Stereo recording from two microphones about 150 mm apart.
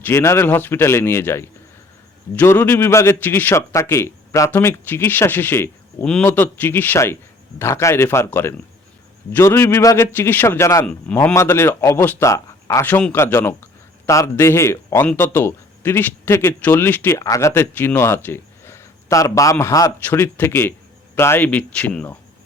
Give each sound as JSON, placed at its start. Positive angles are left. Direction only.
{"t": 0.0, "sound": "speech", "side_deg": 15}
{"t": 10.8, "sound": "speech", "side_deg": 10}